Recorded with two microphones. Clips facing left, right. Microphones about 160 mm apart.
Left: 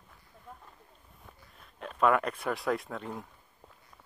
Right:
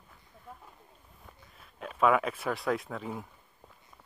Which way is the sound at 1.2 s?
Centre (ahead or behind).